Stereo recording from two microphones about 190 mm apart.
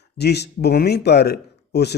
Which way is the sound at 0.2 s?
60° left (ahead or behind).